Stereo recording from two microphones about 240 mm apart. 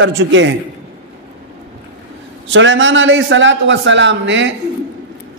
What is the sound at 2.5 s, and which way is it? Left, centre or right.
A man's voice, right.